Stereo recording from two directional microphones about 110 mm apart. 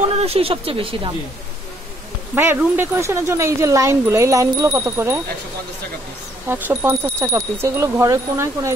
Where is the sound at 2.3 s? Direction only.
20° right (ahead or behind).